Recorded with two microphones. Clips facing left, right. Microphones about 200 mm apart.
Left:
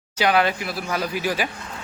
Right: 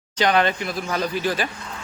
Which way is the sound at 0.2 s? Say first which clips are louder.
Even; 5° left (ahead or behind).